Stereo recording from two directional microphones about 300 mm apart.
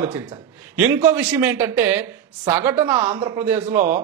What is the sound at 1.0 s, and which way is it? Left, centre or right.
Speech, centre.